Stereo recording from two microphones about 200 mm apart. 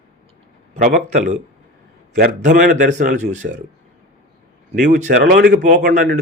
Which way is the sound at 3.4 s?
50° right (ahead or behind).